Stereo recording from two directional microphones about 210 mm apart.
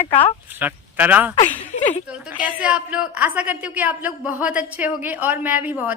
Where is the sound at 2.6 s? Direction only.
5° right (ahead or behind).